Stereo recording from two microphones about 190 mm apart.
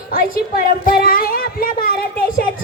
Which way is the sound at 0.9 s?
50° left (ahead or behind).